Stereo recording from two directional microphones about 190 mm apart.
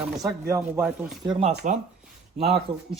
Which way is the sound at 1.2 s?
25° right (ahead or behind).